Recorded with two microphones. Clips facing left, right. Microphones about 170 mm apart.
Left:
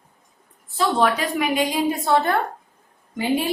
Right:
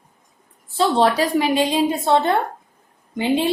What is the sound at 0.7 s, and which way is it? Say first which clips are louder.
A woman's voice: right 3 dB; 30° right (ahead or behind).